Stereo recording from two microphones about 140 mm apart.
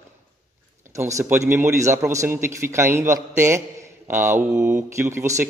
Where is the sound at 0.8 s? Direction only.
20° right (ahead or behind).